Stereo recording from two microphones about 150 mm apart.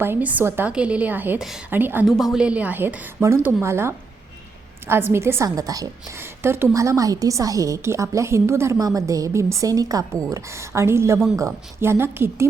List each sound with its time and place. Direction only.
0.0 s a woman's voice: 15° right (ahead or behind)
2.0 s a woman's voice: centre (ahead or behind); by 3.9 s 15° right (ahead or behind)
5.1 s a woman's voice: 15° right (ahead or behind)